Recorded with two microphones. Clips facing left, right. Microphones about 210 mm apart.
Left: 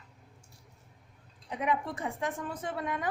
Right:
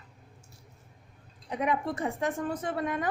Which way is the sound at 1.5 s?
40° right (ahead or behind).